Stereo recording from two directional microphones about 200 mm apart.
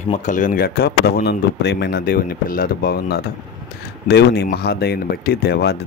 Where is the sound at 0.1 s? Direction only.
40° left (ahead or behind).